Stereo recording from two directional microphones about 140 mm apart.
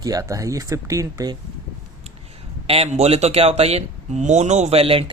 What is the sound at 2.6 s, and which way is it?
Speech, 45° right (ahead or behind).